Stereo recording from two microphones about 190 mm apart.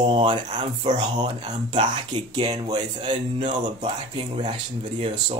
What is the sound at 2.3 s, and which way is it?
Speech, 25° right (ahead or behind).